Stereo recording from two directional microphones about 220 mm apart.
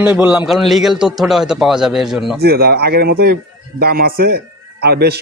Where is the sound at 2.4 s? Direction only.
45° right (ahead or behind).